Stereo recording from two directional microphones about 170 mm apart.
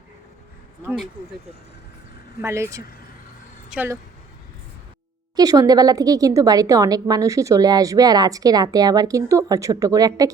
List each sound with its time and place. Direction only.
2.4 s speech: 15° right (ahead or behind)
5.4 s a woman's voice: 20° right (ahead or behind)